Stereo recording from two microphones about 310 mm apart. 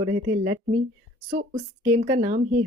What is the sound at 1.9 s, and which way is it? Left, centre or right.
Speech, right.